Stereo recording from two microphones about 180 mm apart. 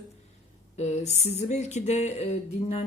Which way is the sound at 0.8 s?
35° left (ahead or behind).